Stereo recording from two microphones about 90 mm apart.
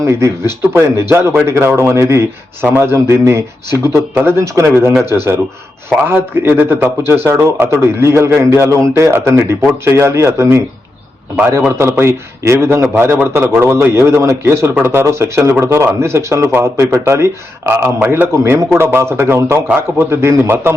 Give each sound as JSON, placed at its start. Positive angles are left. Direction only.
{"t": 0.0, "sound": "a man's voice", "side_deg": -30}